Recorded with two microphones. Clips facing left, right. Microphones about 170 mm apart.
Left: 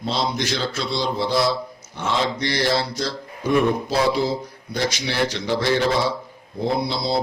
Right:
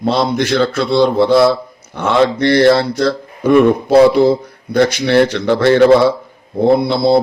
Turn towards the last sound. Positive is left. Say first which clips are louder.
# right 11 dB
turn(degrees=-60)  # may be behind; listen again after turning